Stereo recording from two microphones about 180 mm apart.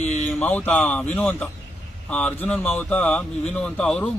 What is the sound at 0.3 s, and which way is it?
A man's voice, 5° left (ahead or behind).